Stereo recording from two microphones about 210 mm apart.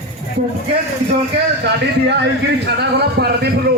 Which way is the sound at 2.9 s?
50° right (ahead or behind).